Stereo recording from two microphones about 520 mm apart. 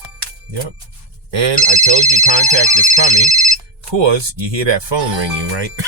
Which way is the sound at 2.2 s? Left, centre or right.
Right.